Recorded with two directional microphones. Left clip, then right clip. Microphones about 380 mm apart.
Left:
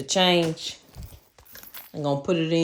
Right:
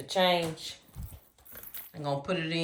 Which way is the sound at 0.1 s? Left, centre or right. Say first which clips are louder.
Left 5 dB; left.